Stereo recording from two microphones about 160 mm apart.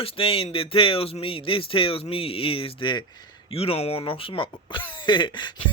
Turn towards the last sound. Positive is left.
turn(degrees=30)  # may be behind; listen again after turning